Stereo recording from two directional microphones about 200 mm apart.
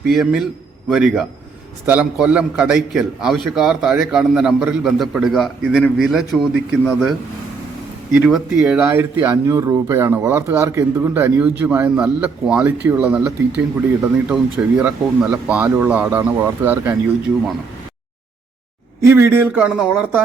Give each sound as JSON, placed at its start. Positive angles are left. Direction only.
{"t": 0.1, "sound": "a man's voice", "side_deg": 0}
{"t": 19.0, "sound": "speech", "side_deg": -10}